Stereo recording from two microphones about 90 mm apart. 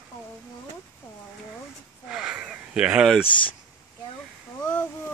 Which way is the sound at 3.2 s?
70° left (ahead or behind).